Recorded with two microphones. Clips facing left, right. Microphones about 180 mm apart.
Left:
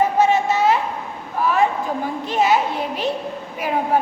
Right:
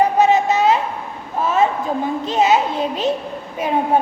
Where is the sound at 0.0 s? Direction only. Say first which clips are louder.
Right 2 dB; 20° right (ahead or behind).